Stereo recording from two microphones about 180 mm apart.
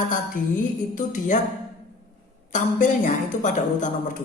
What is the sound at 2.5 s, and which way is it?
A man's voice, 45° left (ahead or behind).